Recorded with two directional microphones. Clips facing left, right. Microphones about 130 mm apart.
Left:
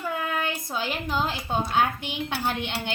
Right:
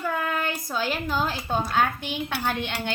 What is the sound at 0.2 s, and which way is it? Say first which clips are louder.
Speech: right 1 dB; 20° left (ahead or behind).